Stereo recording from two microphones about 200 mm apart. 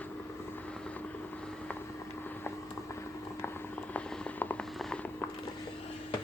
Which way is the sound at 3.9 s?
5° left (ahead or behind).